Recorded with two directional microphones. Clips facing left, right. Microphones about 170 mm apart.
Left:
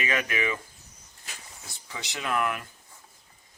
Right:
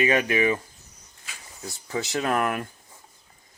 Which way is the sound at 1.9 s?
45° right (ahead or behind).